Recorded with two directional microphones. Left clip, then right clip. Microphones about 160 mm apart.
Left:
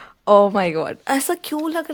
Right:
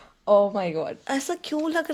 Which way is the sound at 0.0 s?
45° left (ahead or behind).